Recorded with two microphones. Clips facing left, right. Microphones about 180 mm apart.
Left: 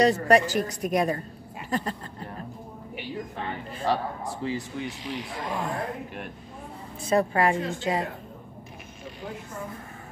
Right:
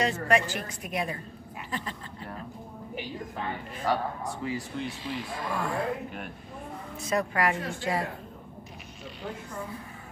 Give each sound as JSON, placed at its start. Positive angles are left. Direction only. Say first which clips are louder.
{"t": 0.0, "sound": "a woman's voice", "louder": "left 6 dB", "side_deg": 40}
{"t": 3.8, "sound": "speech", "louder": "left 2 dB", "side_deg": 30}
{"t": 4.7, "sound": "speech", "louder": "left 1 dB", "side_deg": 15}
{"t": 7.1, "sound": "speech", "louder": "left 5 dB", "side_deg": 30}